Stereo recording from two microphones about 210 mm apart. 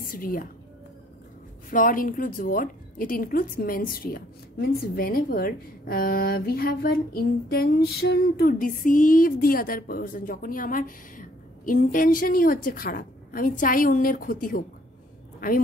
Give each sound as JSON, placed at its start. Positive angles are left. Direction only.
{"t": 0.0, "sound": "a woman's voice", "side_deg": 40}
{"t": 1.7, "sound": "a woman's voice", "side_deg": 40}